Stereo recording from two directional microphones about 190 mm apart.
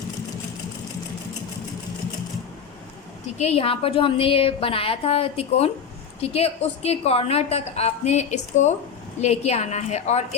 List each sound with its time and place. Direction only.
3.3 s a woman's voice: 35° left (ahead or behind)